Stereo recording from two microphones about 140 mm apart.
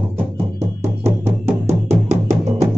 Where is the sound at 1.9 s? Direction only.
55° right (ahead or behind).